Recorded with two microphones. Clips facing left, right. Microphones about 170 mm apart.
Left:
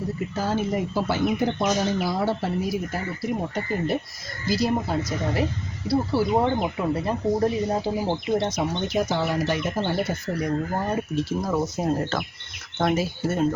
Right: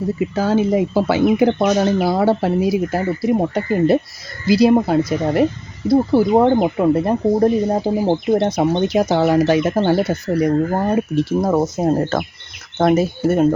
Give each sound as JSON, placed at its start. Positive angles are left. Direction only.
{"t": 0.2, "sound": "speech", "side_deg": -90}
{"t": 4.4, "sound": "speech", "side_deg": -70}
{"t": 8.4, "sound": "speech", "side_deg": -60}
{"t": 10.5, "sound": "speech", "side_deg": -65}